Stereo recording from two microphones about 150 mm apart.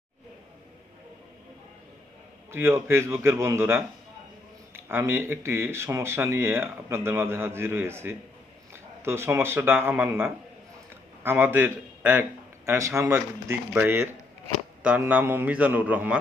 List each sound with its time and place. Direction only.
2.5 s a man's voice: 15° right (ahead or behind)